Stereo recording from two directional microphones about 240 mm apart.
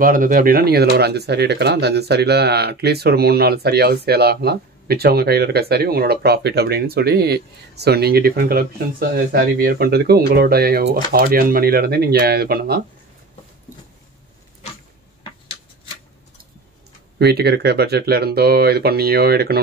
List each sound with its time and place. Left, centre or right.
0.0 s speech: right
17.2 s speech: right